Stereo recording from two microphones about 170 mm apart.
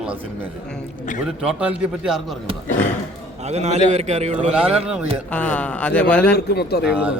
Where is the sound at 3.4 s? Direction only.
40° right (ahead or behind).